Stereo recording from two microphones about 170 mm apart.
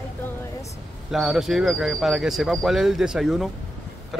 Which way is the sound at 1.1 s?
Centre (ahead or behind).